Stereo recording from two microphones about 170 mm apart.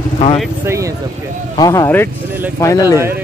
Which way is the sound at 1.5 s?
20° left (ahead or behind).